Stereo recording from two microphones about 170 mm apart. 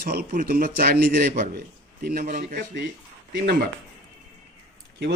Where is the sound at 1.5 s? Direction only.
60° right (ahead or behind).